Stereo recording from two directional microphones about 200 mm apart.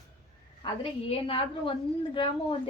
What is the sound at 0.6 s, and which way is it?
Speech, 25° left (ahead or behind).